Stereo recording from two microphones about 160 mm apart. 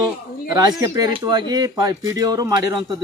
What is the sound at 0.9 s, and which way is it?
Speech, 25° right (ahead or behind).